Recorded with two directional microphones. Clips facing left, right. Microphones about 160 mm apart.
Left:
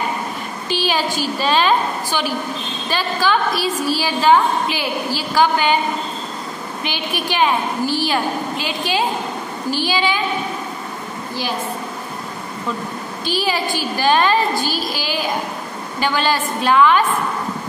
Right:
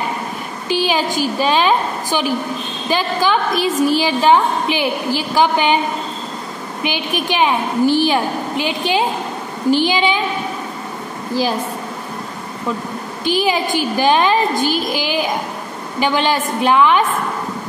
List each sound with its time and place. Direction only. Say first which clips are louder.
0.7 s a woman's voice: right 3 dB; 15° right (ahead or behind)
6.8 s a woman's voice: right 4 dB; 15° right (ahead or behind)
13.2 s a woman's voice: right 4 dB; 15° right (ahead or behind)